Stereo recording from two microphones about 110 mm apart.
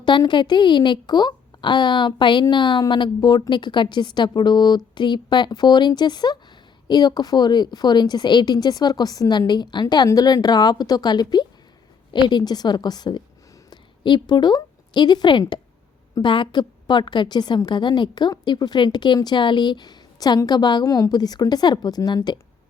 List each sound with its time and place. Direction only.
0.0 s a woman's voice: 45° left (ahead or behind)